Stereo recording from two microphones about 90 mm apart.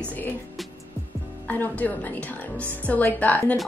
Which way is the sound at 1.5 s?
20° left (ahead or behind).